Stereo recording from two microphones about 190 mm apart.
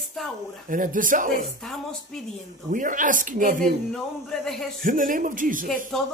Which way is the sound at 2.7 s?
45° right (ahead or behind).